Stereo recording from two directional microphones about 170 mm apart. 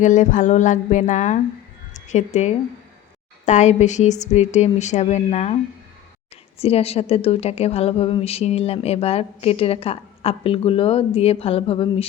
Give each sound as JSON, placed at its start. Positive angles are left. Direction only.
{"t": 0.0, "sound": "speech", "side_deg": 45}
{"t": 6.6, "sound": "a woman's voice", "side_deg": 35}